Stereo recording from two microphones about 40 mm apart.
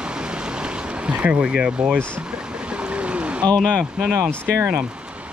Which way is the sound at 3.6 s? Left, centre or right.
Left.